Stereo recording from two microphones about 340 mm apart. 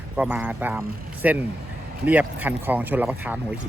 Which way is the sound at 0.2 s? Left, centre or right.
Centre.